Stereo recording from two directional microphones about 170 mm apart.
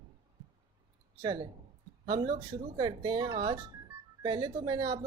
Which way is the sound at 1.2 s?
25° right (ahead or behind).